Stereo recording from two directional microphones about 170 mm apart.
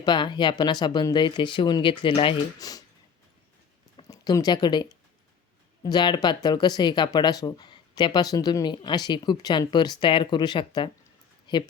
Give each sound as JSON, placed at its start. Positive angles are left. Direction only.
{"t": 0.0, "sound": "speech", "side_deg": 25}
{"t": 3.9, "sound": "speech", "side_deg": 25}